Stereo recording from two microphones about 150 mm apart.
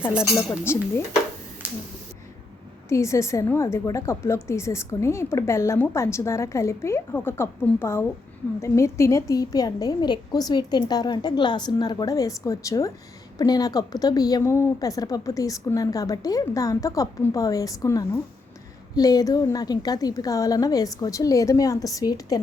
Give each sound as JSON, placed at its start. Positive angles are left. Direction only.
{"t": 0.2, "sound": "speech", "side_deg": 20}
{"t": 1.6, "sound": "a sound", "side_deg": -10}
{"t": 2.9, "sound": "a woman's voice", "side_deg": 20}